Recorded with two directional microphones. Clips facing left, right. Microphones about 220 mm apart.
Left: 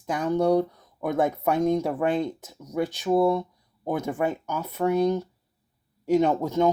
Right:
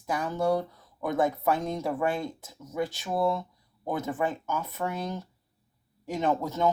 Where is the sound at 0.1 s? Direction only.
20° left (ahead or behind).